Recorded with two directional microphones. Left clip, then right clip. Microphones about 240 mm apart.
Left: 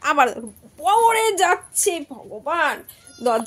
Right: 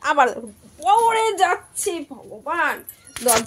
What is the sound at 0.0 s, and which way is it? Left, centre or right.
A woman's voice, left.